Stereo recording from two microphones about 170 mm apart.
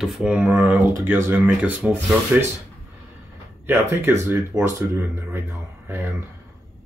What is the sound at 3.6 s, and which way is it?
Speech, 15° right (ahead or behind).